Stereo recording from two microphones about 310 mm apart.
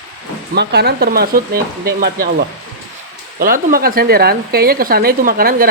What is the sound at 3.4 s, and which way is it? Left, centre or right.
Speech, right.